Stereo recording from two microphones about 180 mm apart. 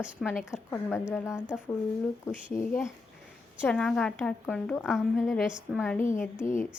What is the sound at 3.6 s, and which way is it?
A woman's voice, 5° left (ahead or behind).